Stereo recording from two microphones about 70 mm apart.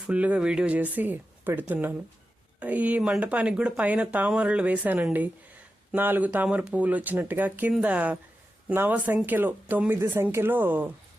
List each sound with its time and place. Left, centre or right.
0.0 s speech: centre